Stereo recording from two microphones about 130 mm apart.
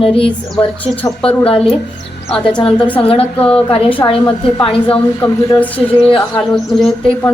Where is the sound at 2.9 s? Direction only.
45° left (ahead or behind).